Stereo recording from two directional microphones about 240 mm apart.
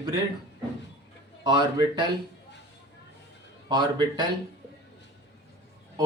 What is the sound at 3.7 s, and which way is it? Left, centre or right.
Speech, centre.